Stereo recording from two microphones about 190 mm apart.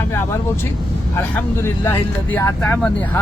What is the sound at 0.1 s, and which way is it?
Speech, 10° left (ahead or behind).